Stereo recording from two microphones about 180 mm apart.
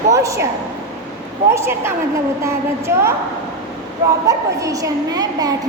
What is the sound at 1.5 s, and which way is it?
A woman's voice, 15° right (ahead or behind).